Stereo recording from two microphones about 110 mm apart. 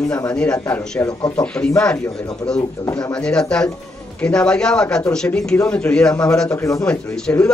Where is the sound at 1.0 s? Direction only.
25° left (ahead or behind).